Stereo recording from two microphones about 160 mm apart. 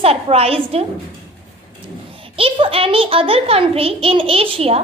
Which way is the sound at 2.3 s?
35° right (ahead or behind).